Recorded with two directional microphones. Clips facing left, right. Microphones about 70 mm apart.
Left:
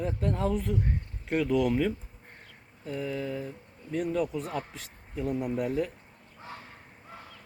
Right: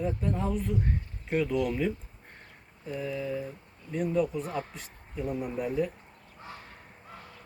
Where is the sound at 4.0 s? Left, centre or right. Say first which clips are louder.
Right 2 dB; left.